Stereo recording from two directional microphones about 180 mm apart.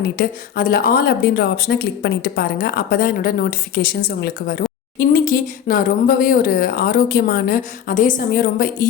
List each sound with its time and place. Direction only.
0.2 s speech: 50° left (ahead or behind)